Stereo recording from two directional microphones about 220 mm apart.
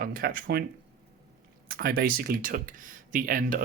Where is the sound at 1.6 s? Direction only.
45° right (ahead or behind).